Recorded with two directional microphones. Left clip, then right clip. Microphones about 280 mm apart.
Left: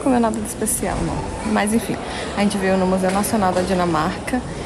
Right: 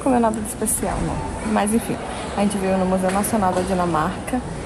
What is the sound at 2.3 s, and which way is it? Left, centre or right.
A woman's voice, centre.